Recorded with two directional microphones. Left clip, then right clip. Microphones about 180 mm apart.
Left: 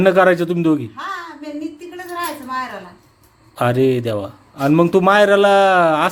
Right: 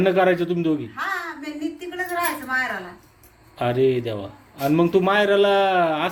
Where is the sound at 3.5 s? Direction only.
50° left (ahead or behind).